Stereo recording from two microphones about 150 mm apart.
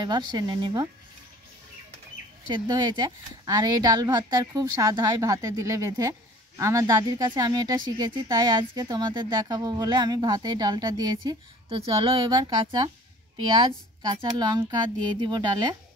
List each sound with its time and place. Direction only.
0.0 s speech: 30° right (ahead or behind)
2.4 s speech: 30° right (ahead or behind)